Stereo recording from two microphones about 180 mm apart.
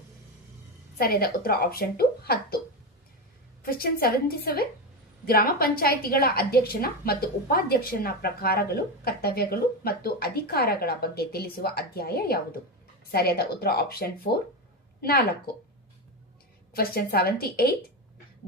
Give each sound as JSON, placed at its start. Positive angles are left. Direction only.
{"t": 0.9, "sound": "a woman's voice", "side_deg": 60}
{"t": 3.7, "sound": "a woman's voice", "side_deg": 55}
{"t": 16.7, "sound": "a woman's voice", "side_deg": 55}